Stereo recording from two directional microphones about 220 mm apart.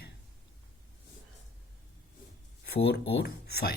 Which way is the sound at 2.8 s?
45° left (ahead or behind).